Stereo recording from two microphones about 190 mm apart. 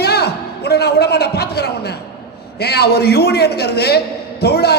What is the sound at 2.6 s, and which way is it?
A man's voice, 60° left (ahead or behind).